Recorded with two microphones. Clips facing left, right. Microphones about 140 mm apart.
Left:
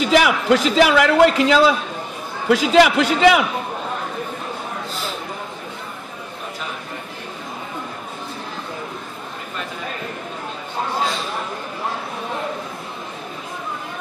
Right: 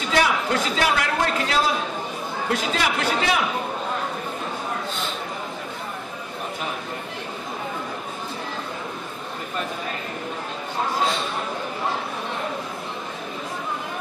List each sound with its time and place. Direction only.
0.0 s a man's voice: 90° left